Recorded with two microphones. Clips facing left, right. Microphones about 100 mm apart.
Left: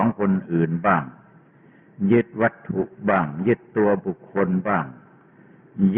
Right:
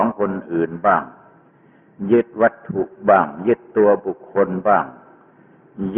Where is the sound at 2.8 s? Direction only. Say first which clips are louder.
Right 7 dB; 40° right (ahead or behind).